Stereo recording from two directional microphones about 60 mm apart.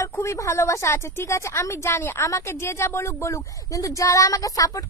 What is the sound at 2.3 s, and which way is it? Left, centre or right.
A woman's voice, left.